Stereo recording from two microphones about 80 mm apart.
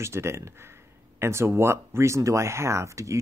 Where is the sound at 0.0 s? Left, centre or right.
Right.